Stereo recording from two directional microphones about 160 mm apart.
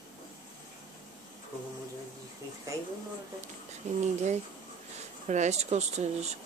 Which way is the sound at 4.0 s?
45° right (ahead or behind).